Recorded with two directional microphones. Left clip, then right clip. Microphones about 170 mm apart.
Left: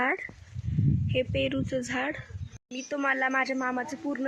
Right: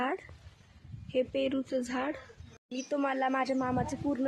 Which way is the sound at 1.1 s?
5° left (ahead or behind).